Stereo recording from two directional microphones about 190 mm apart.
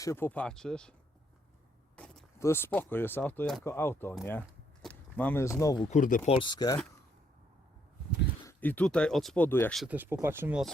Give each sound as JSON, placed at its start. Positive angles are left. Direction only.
{"t": 0.0, "sound": "speech", "side_deg": 15}
{"t": 2.4, "sound": "speech", "side_deg": 10}
{"t": 5.9, "sound": "speech", "side_deg": 45}
{"t": 6.3, "sound": "speech", "side_deg": 25}
{"t": 8.4, "sound": "speech", "side_deg": 10}
{"t": 9.7, "sound": "speech", "side_deg": -5}